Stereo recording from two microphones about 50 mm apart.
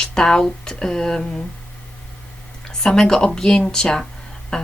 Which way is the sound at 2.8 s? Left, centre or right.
Centre.